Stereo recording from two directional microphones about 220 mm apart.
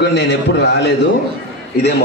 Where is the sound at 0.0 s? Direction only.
50° left (ahead or behind).